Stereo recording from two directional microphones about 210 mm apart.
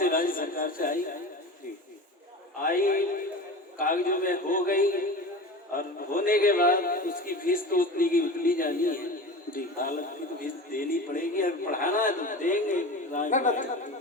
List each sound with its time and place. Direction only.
0.0 s a man's voice: 40° left (ahead or behind)
2.6 s a man's voice: 40° left (ahead or behind)